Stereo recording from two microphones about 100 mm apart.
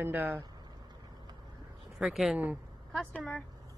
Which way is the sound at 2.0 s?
Centre (ahead or behind).